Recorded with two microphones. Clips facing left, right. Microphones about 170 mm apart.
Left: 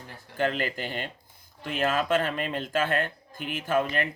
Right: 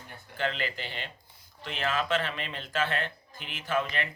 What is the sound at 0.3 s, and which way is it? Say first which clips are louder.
Speech: left 5 dB; 45° left (ahead or behind).